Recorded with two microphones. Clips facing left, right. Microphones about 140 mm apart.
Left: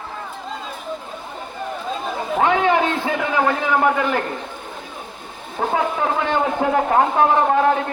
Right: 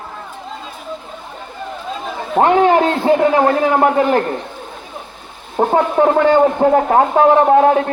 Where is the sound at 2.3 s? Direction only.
40° right (ahead or behind).